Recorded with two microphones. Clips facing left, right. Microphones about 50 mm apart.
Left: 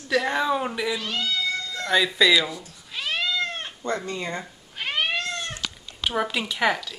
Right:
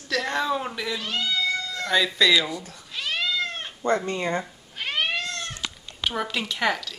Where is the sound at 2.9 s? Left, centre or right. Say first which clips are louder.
Left 1 dB; centre.